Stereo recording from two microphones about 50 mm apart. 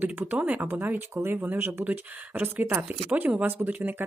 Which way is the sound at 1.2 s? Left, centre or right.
Right.